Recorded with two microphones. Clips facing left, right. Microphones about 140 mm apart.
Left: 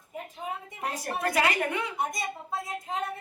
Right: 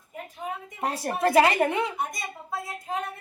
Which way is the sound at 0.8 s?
30° right (ahead or behind).